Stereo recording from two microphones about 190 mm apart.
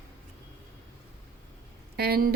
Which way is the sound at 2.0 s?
55° right (ahead or behind).